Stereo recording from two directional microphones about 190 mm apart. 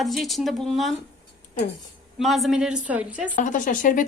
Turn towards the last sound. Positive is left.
turn(degrees=45)  # may be behind; listen again after turning